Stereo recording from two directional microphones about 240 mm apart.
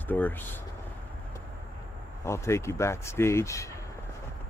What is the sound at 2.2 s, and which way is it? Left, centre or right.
Speech, centre.